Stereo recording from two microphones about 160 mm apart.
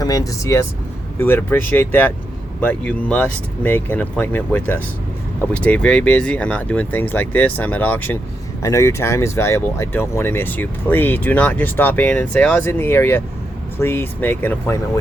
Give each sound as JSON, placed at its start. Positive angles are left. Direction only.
{"t": 0.0, "sound": "speech", "side_deg": 20}